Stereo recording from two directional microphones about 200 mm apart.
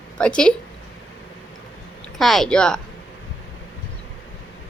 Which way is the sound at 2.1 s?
Centre (ahead or behind).